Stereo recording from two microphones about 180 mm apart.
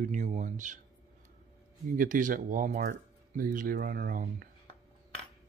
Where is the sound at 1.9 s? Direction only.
45° right (ahead or behind).